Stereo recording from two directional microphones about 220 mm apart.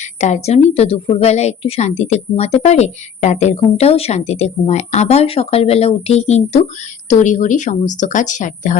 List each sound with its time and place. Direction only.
0.2 s a woman's voice: 30° left (ahead or behind)